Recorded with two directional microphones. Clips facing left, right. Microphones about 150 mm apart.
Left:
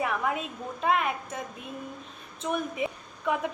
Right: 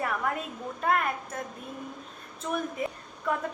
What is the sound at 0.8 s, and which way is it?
Speech, 10° left (ahead or behind).